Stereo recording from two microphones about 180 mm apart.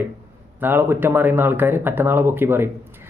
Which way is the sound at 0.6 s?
10° right (ahead or behind).